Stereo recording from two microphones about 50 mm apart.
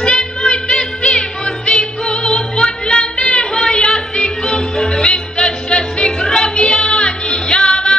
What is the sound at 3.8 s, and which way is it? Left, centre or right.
Music, centre.